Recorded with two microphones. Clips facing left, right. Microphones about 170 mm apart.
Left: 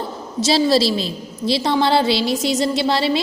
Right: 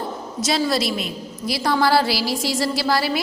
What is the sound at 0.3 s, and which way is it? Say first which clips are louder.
A woman's voice: left 6 dB; 25° left (ahead or behind).